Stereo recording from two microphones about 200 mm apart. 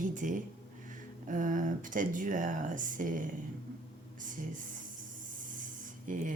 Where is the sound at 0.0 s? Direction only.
40° right (ahead or behind).